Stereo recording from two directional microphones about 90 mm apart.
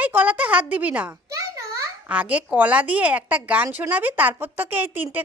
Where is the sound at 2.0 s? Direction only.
15° right (ahead or behind).